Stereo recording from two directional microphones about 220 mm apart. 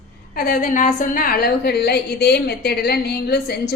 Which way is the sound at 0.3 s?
40° left (ahead or behind).